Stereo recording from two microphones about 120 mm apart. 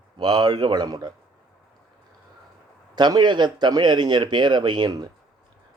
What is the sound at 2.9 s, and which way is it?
A man's voice, 35° right (ahead or behind).